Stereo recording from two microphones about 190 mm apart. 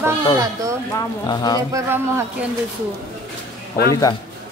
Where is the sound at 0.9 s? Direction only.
20° left (ahead or behind).